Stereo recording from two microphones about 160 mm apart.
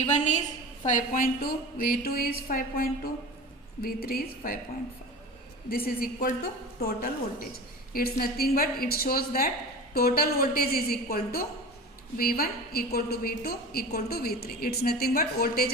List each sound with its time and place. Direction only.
0.0 s a woman's voice: 50° left (ahead or behind); by 4.5 s 70° left (ahead or behind)
5.6 s a woman's voice: 65° left (ahead or behind)